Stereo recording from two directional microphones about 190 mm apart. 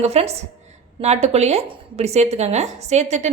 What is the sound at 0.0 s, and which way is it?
A woman's voice, 35° right (ahead or behind).